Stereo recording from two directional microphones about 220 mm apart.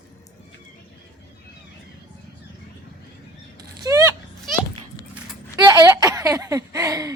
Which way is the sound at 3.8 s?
15° right (ahead or behind).